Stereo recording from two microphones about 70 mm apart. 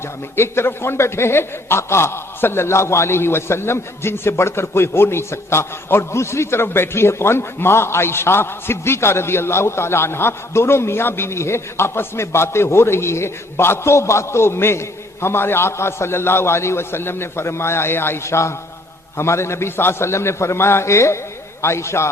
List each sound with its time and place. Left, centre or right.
0.3 s a man's voice: left